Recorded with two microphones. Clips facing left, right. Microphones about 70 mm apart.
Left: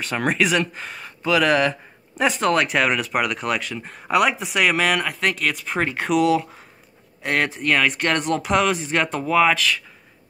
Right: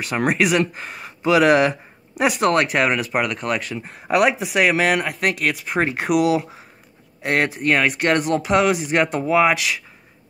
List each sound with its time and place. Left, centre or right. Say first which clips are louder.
0.0 s speech: right 2 dB; centre
0.8 s speech: right 4 dB; centre